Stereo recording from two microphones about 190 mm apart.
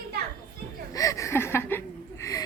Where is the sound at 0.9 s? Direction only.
15° left (ahead or behind).